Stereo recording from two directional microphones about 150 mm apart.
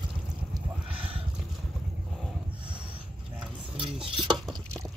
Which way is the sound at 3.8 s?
35° right (ahead or behind).